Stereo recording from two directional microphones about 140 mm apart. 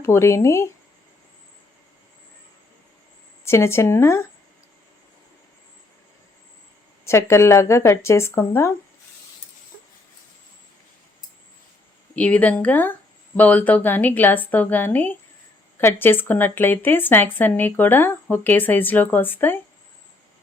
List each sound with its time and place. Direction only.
0.0 s speech: 20° left (ahead or behind)
3.4 s speech: 20° left (ahead or behind)
7.0 s speech: 20° left (ahead or behind)
12.1 s a woman's voice: 10° left (ahead or behind)